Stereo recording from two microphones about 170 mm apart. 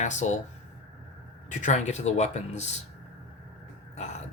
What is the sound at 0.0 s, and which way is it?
Speech, 45° left (ahead or behind).